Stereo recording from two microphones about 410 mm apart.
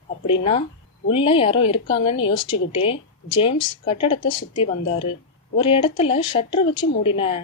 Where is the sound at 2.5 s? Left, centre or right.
Centre.